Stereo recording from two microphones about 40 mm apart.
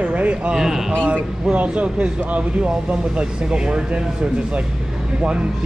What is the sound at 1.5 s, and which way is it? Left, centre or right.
Speech, right.